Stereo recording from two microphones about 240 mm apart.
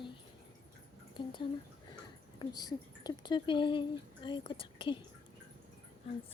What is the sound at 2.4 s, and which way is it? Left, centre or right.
Speech, centre.